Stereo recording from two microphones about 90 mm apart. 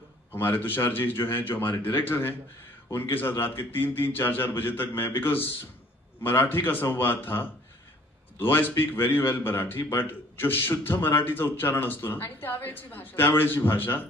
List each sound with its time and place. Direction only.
0.3 s speech: 25° left (ahead or behind)